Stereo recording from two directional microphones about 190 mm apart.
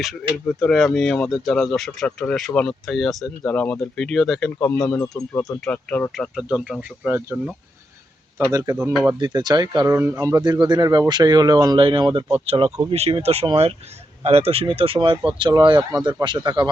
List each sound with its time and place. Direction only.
0.6 s speech: centre (ahead or behind)
4.8 s speech: 20° left (ahead or behind); by 7.5 s 10° right (ahead or behind)
8.5 s speech: 15° right (ahead or behind)
8.8 s speech: 5° right (ahead or behind)
9.1 s speech: 20° right (ahead or behind)